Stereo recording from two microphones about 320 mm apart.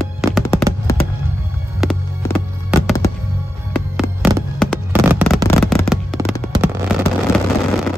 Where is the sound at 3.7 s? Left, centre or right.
Centre.